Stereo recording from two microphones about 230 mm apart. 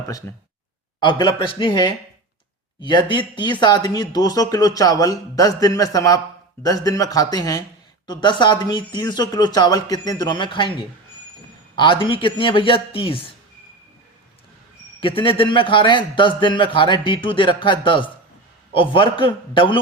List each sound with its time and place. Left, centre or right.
0.3 s speech: centre
0.9 s a man's voice: left
15.0 s a man's voice: left